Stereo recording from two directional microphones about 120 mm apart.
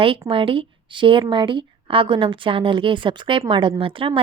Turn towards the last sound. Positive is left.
turn(degrees=-45)  # may be behind; listen again after turning